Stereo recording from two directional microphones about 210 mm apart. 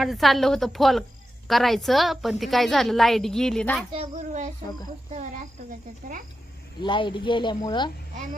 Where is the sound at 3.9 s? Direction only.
30° right (ahead or behind).